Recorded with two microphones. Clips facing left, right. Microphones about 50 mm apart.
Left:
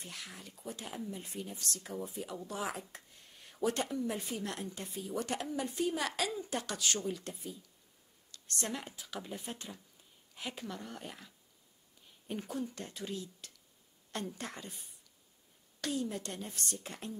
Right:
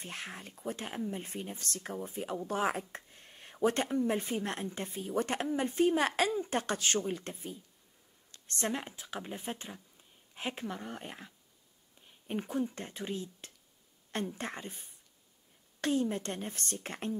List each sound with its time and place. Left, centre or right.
0.0 s speech: right